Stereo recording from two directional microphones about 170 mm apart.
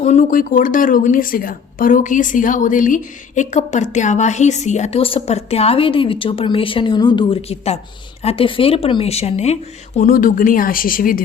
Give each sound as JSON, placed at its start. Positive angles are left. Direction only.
{"t": 0.0, "sound": "a woman's voice", "side_deg": 45}
{"t": 10.1, "sound": "speech", "side_deg": 55}